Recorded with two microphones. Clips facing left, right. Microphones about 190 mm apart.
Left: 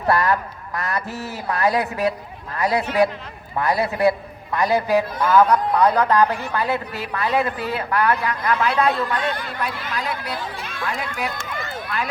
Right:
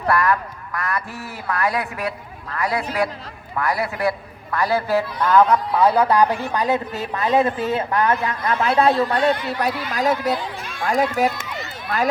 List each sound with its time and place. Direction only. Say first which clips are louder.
0.1 s speech: even; 25° left (ahead or behind)
5.2 s a man's voice: right 1 dB; 5° left (ahead or behind); by 11.3 s 45° right (ahead or behind)
11.4 s run: left 2 dB; 50° left (ahead or behind)